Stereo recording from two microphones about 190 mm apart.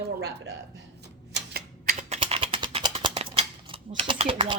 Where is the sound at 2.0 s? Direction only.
35° right (ahead or behind).